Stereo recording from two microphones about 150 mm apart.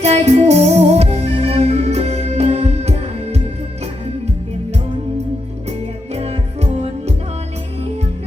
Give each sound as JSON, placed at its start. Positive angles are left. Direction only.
{"t": 0.0, "sound": "music", "side_deg": -45}
{"t": 6.1, "sound": "music", "side_deg": -45}